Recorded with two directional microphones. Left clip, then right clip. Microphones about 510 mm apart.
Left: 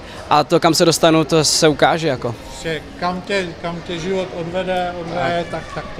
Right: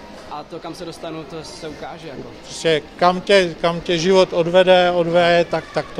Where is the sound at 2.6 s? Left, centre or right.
Right.